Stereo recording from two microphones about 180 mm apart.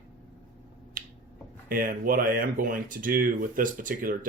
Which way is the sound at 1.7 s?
55° right (ahead or behind).